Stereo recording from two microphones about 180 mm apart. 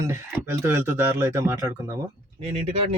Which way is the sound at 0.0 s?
15° right (ahead or behind).